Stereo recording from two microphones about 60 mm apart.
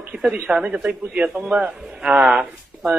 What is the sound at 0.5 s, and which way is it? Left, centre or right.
A man's voice, centre.